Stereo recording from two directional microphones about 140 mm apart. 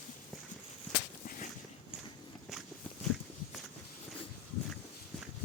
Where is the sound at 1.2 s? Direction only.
75° left (ahead or behind).